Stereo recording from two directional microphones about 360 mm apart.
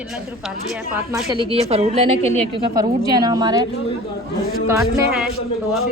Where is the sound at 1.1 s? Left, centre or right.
Centre.